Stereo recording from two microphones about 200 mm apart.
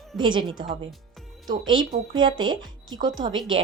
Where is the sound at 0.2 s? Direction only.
25° right (ahead or behind).